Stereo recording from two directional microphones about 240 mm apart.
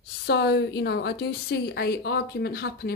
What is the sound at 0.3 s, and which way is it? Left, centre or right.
A woman's voice, left.